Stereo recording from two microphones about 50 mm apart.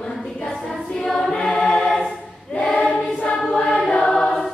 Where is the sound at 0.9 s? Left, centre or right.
Centre.